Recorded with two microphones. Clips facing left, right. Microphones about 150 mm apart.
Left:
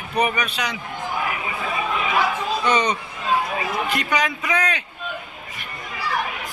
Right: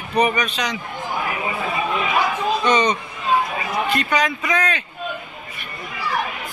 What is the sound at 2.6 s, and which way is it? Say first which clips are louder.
Speech: right 1 dB; 10° left (ahead or behind).